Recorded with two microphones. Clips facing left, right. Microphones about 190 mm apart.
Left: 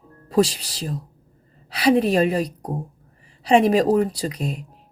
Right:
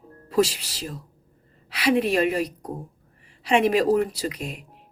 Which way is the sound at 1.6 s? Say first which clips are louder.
Left 4 dB; 35° left (ahead or behind).